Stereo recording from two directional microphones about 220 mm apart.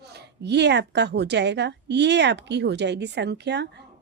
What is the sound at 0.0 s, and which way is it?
A woman's voice, 50° right (ahead or behind).